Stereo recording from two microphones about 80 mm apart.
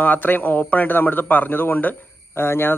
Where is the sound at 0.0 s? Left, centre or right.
Left.